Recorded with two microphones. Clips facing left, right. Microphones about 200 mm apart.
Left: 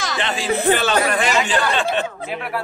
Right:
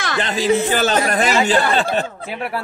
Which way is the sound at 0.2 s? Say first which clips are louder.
Right 4 dB; 40° right (ahead or behind).